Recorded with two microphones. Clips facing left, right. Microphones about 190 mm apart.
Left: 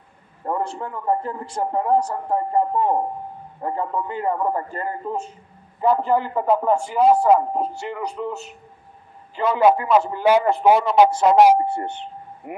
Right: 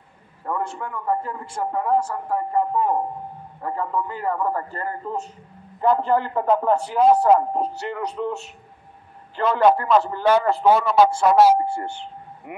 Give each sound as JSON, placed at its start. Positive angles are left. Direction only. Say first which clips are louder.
{"t": 0.4, "sound": "a man's voice", "louder": "left 2 dB", "side_deg": 25}
{"t": 5.8, "sound": "a man's voice", "louder": "even", "side_deg": 5}